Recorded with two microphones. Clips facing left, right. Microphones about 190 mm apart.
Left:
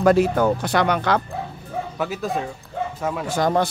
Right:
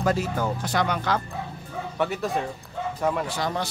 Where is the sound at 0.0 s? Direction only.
65° left (ahead or behind).